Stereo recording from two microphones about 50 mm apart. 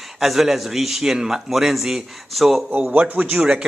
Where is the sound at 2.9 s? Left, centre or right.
Right.